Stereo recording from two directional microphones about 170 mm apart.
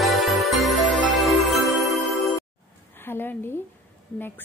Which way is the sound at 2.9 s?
10° left (ahead or behind).